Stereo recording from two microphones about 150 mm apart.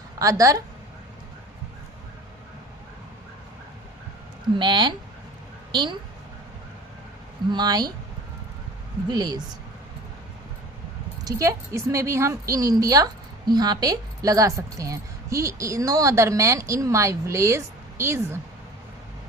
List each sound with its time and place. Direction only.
0.2 s a woman's voice: 20° right (ahead or behind)
4.5 s speech: 30° right (ahead or behind)
7.5 s a woman's voice: 25° right (ahead or behind)
9.0 s a woman's voice: 25° right (ahead or behind)
11.3 s a woman's voice: 20° right (ahead or behind)